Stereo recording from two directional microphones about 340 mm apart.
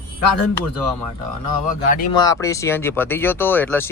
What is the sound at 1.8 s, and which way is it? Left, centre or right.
Speech, left.